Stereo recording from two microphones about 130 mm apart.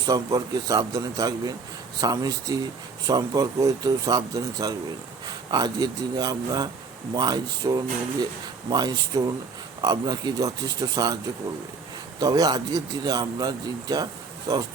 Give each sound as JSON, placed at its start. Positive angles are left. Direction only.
{"t": 0.0, "sound": "speech", "side_deg": -30}
{"t": 12.2, "sound": "speech", "side_deg": -30}